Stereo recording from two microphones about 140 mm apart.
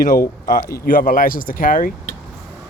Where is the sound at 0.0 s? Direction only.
90° left.